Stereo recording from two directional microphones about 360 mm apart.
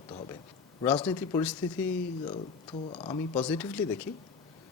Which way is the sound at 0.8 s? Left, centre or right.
Centre.